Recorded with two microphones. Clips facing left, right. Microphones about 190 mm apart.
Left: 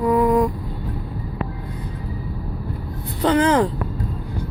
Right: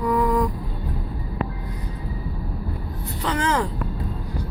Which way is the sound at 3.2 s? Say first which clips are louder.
Left 7 dB; 30° left (ahead or behind).